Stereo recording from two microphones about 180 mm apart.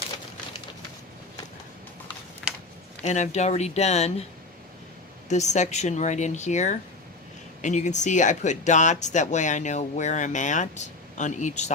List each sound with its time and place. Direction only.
2.4 s a sound: centre (ahead or behind)
3.0 s speech: 40° left (ahead or behind)
5.3 s speech: 40° left (ahead or behind)